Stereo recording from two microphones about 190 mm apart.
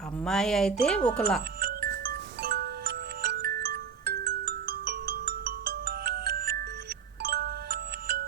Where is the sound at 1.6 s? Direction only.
55° right (ahead or behind).